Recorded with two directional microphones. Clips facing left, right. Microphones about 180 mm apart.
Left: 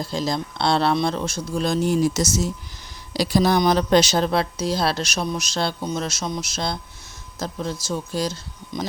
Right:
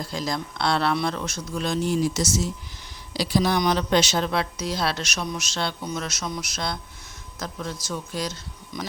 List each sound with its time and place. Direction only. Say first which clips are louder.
0.0 s speech: left 4 dB; 30° left (ahead or behind)